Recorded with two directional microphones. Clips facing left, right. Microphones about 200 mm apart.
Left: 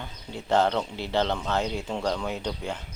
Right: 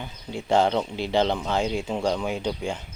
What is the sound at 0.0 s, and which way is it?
Speech, 10° right (ahead or behind).